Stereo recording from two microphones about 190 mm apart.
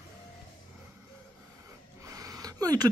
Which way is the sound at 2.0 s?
15° right (ahead or behind).